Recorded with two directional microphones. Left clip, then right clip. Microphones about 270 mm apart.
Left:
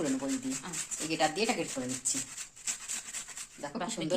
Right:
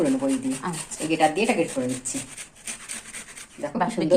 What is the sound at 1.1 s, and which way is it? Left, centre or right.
Speech, left.